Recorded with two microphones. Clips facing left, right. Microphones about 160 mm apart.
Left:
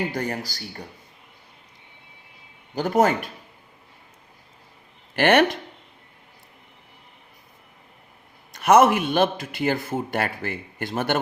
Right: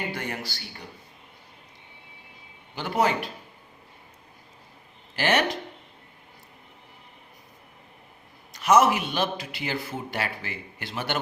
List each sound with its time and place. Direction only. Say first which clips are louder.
0.1 s speech: left 5 dB; 40° left (ahead or behind)
2.7 s a man's voice: left 5 dB; 45° left (ahead or behind)
5.1 s speech: left 6 dB; 55° left (ahead or behind)
8.5 s a man's voice: left 4 dB; 55° left (ahead or behind)